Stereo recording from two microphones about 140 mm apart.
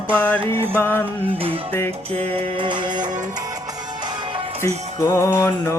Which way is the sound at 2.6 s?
35° right (ahead or behind).